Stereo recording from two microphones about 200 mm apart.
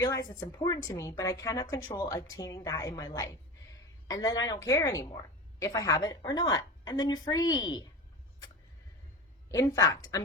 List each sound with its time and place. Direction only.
0.0 s a woman's voice: 15° left (ahead or behind)
9.5 s speech: 15° left (ahead or behind)